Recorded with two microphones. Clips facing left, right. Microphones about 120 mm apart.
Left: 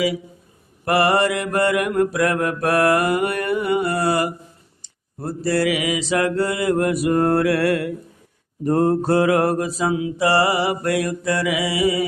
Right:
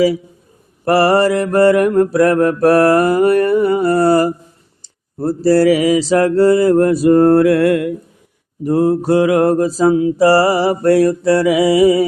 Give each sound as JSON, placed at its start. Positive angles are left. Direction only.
{"t": 0.9, "sound": "mantra", "side_deg": -35}
{"t": 8.6, "sound": "mantra", "side_deg": -10}